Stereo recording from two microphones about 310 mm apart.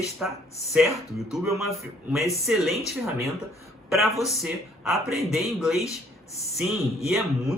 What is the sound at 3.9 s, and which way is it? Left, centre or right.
A man's voice, centre.